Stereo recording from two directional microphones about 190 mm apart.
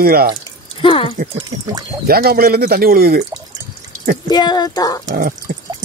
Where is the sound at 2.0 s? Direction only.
50° right (ahead or behind).